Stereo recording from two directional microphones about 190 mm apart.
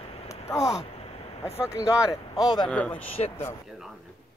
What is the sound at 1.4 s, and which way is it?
Speech, 15° left (ahead or behind).